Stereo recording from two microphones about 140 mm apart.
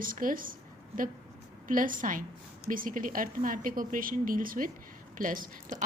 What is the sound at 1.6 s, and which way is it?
A woman's voice, 75° right (ahead or behind).